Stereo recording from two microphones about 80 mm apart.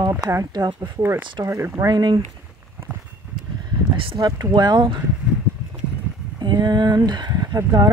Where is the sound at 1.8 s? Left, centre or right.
Right.